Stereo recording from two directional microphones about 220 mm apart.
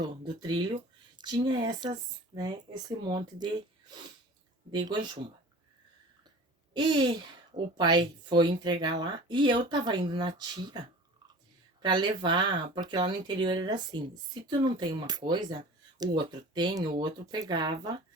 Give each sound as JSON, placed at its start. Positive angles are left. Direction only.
{"t": 0.0, "sound": "speech", "side_deg": -20}
{"t": 4.7, "sound": "speech", "side_deg": -20}
{"t": 6.7, "sound": "speech", "side_deg": -20}